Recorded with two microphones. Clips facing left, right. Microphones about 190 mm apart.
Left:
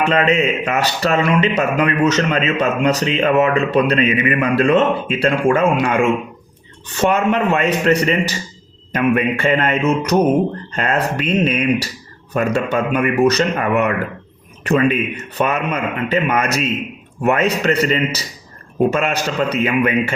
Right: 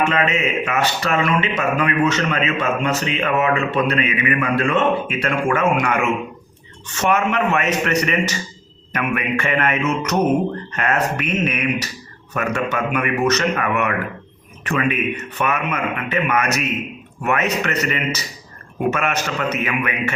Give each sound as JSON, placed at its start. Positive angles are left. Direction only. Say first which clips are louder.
{"t": 0.1, "sound": "speech", "louder": "left 4 dB", "side_deg": 35}